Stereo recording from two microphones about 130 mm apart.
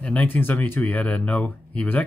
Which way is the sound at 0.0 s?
10° left (ahead or behind).